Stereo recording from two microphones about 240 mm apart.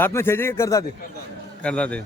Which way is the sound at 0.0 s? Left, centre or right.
Centre.